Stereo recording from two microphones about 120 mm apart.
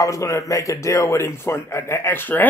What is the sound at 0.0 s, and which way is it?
Speech, 25° left (ahead or behind).